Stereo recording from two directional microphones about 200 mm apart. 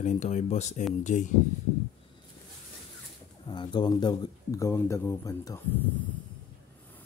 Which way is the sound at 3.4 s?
25° left (ahead or behind).